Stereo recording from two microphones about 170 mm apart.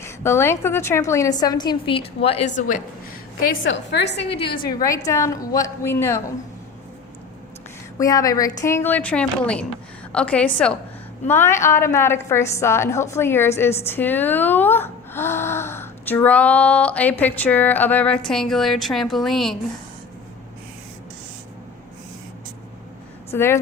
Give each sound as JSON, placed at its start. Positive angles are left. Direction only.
{"t": 0.0, "sound": "a woman's voice", "side_deg": 15}
{"t": 3.6, "sound": "a woman's voice", "side_deg": 90}
{"t": 4.2, "sound": "a woman's voice", "side_deg": 35}
{"t": 7.9, "sound": "a woman's voice", "side_deg": 20}
{"t": 23.3, "sound": "a woman's voice", "side_deg": 15}